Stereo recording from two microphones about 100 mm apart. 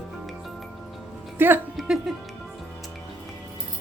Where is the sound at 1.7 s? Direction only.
Centre (ahead or behind).